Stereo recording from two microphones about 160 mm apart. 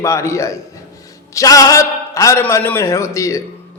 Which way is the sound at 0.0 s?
20° left (ahead or behind).